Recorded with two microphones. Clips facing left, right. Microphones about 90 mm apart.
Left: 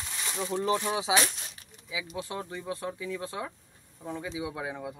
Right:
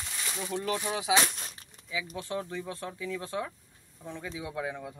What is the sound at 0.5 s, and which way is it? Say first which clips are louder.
Speech: left 4 dB; 25° left (ahead or behind).